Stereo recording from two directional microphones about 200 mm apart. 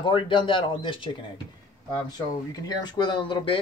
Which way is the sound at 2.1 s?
20° left (ahead or behind).